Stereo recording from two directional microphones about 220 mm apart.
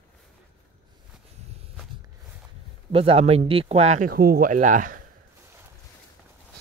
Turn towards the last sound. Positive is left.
turn(degrees=-35)  # may be behind; listen again after turning